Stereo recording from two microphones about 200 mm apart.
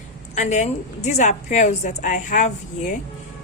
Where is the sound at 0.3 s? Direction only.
35° left (ahead or behind).